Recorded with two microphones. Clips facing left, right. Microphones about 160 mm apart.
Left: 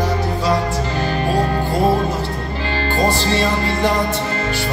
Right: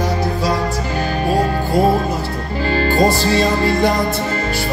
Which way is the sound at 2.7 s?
45° right (ahead or behind).